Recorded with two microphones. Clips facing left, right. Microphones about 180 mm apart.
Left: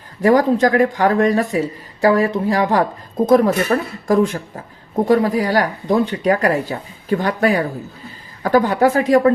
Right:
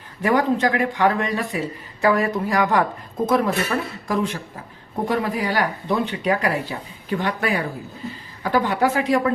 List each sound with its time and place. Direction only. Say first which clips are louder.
0.2 s speech: left 6 dB; 40° left (ahead or behind)